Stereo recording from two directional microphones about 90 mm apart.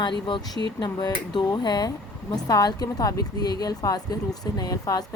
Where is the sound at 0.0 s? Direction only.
65° left (ahead or behind).